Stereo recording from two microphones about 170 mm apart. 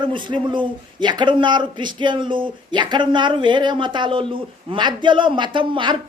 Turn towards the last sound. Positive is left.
turn(degrees=-30)  # may be behind; listen again after turning